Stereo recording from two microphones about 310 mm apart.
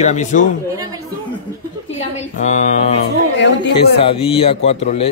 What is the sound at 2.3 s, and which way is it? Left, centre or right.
Speech, left.